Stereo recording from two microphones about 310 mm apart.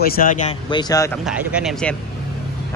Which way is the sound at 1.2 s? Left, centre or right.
Centre.